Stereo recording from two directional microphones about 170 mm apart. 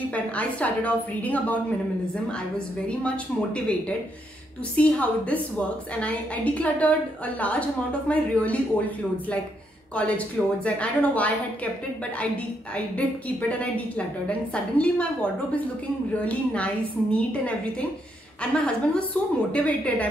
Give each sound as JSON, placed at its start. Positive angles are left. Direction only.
{"t": 0.1, "sound": "a woman's voice", "side_deg": 10}
{"t": 2.9, "sound": "a woman's voice", "side_deg": 5}
{"t": 4.7, "sound": "a woman's voice", "side_deg": 10}
{"t": 13.5, "sound": "a woman's voice", "side_deg": 5}
{"t": 16.3, "sound": "a woman's voice", "side_deg": 5}